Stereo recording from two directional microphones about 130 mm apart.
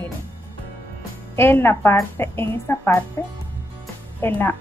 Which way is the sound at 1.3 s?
20° left (ahead or behind).